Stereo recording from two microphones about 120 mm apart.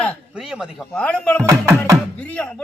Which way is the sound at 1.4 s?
25° right (ahead or behind).